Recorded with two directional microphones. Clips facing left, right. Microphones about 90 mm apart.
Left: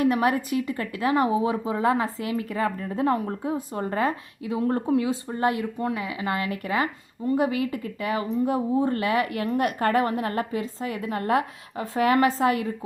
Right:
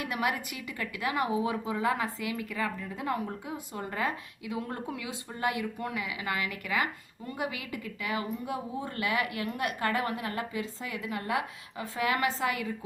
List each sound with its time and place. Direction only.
0.0 s speech: 35° left (ahead or behind)